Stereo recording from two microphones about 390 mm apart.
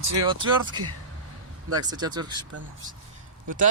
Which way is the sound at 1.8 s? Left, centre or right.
Centre.